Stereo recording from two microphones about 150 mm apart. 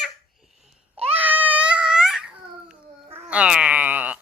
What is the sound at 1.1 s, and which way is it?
Crying, 10° right (ahead or behind).